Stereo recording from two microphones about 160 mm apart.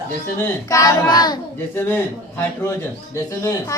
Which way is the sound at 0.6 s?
20° left (ahead or behind).